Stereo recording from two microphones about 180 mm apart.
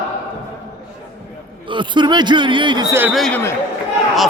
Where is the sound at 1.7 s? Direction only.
25° right (ahead or behind).